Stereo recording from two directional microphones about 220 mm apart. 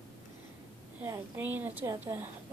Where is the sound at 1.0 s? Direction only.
10° right (ahead or behind).